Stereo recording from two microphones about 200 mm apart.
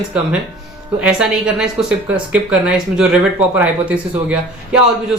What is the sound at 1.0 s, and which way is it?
A woman's voice, 5° right (ahead or behind).